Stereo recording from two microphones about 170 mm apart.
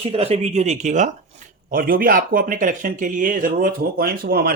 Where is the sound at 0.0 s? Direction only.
35° right (ahead or behind).